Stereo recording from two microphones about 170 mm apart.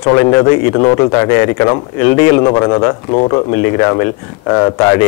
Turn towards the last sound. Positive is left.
turn(degrees=20)  # may be behind; listen again after turning